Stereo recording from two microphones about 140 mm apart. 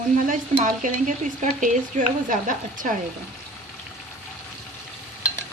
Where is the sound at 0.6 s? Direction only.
65° right (ahead or behind).